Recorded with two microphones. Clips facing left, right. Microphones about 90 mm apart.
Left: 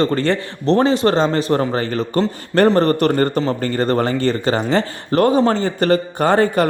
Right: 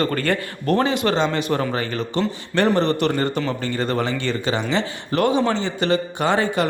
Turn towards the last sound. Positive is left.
turn(degrees=45)  # may be behind; listen again after turning